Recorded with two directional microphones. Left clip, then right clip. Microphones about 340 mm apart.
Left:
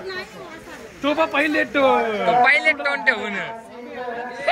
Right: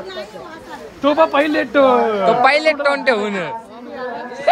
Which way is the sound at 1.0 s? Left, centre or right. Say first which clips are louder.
Right 6 dB; right.